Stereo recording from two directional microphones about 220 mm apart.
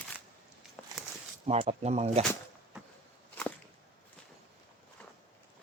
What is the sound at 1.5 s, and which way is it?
Speech, 30° right (ahead or behind).